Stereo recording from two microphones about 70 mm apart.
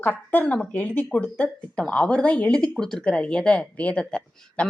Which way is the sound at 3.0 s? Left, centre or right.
Centre.